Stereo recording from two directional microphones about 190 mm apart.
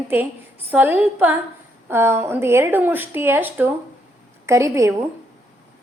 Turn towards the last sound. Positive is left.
turn(degrees=-15)  # may be behind; listen again after turning